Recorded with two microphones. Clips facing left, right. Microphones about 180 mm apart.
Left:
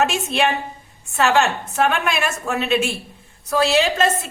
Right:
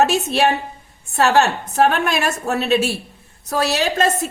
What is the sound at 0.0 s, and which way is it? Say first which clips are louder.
A woman's voice: right 3 dB; 40° right (ahead or behind).